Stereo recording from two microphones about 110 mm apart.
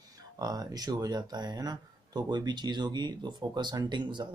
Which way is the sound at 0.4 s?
35° right (ahead or behind).